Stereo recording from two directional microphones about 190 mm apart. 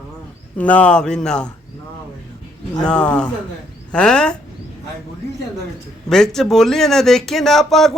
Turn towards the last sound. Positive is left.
turn(degrees=0)  # may be behind; listen again after turning